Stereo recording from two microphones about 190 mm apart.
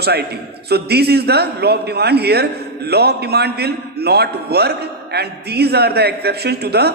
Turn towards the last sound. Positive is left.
turn(degrees=-60)  # may be behind; listen again after turning